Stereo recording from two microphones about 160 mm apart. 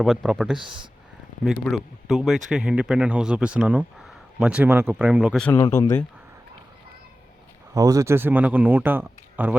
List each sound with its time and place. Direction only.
0.0 s a man's voice: centre (ahead or behind)
5.5 s speech: 30° left (ahead or behind)
7.7 s a man's voice: 20° right (ahead or behind)